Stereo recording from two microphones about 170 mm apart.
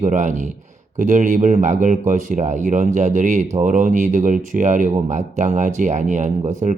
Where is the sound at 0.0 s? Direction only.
45° right (ahead or behind).